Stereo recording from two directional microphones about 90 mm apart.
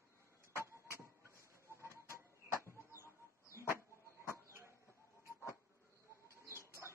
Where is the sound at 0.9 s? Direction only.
30° left (ahead or behind).